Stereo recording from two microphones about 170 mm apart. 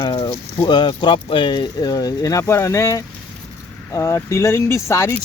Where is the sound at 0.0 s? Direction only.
25° left (ahead or behind).